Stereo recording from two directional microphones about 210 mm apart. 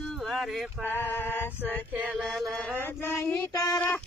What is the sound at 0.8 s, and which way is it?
Male singing, 10° left (ahead or behind).